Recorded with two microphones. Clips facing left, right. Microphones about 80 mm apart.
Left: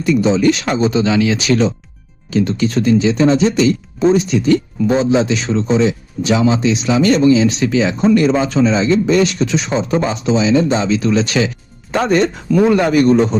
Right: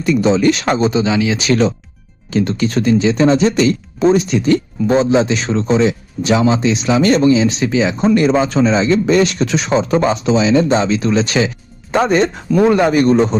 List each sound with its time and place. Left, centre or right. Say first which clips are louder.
0.0 s speech: even; right
0.9 s speech: left 1 dB; centre
2.3 s speech: even; right
7.3 s speech: left 1 dB; right
10.7 s speech: right 1 dB; right
12.9 s speech: even; right